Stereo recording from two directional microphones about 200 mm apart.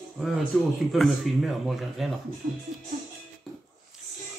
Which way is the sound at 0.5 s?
Centre (ahead or behind).